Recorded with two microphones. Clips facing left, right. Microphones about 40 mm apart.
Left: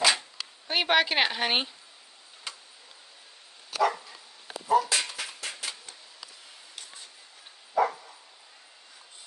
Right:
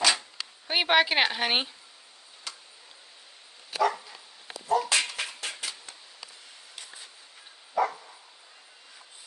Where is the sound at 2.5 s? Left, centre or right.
Centre.